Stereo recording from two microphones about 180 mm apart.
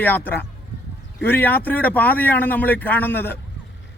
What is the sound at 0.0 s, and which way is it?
Speech, 10° left (ahead or behind).